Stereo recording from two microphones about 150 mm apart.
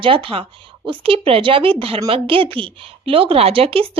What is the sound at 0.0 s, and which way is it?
Speech, 35° right (ahead or behind).